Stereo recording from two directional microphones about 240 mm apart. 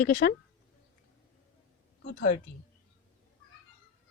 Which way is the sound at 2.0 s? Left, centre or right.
Left.